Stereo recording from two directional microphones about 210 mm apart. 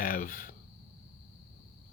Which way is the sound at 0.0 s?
40° left (ahead or behind).